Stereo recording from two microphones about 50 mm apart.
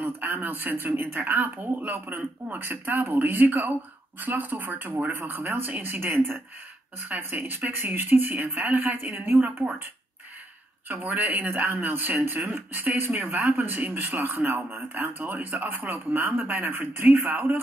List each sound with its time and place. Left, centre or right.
0.0 s speech: right
6.0 s speech: right
10.9 s speech: right
13.1 s speech: right